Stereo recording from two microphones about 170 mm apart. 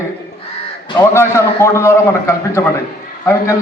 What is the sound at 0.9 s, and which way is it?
A man's voice, 15° left (ahead or behind).